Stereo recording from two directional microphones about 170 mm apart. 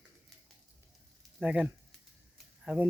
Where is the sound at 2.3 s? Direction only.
5° right (ahead or behind).